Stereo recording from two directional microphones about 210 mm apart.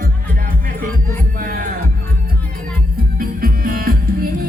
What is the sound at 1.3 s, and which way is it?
Music, 40° right (ahead or behind).